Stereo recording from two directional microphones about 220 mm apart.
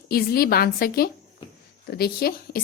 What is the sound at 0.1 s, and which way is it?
A woman's voice, 45° left (ahead or behind).